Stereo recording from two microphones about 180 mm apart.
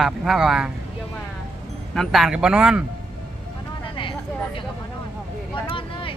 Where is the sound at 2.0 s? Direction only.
Centre (ahead or behind).